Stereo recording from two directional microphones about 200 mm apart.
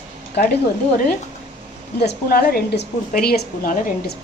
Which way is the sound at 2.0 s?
55° left (ahead or behind).